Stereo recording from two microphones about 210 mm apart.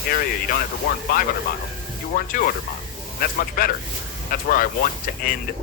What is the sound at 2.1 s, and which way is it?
Speech, 40° left (ahead or behind).